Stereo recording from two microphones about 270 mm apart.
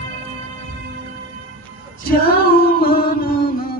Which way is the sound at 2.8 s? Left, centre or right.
Left.